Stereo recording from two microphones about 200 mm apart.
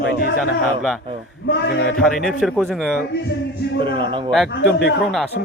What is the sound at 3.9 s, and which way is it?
Speech, 25° right (ahead or behind).